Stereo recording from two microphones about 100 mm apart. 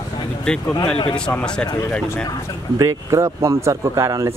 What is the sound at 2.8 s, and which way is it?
Speech, 30° right (ahead or behind).